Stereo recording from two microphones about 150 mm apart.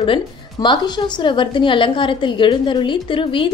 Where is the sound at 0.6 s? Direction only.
20° left (ahead or behind).